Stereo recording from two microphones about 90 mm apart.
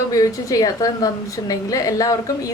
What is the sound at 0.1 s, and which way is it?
A woman's voice, 40° left (ahead or behind).